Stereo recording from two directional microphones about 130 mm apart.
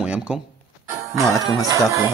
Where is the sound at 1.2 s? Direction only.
25° right (ahead or behind).